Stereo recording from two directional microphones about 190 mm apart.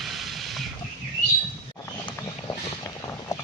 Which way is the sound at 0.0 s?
Centre (ahead or behind).